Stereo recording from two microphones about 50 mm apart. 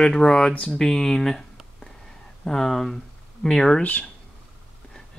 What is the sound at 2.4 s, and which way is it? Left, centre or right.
Speech, centre.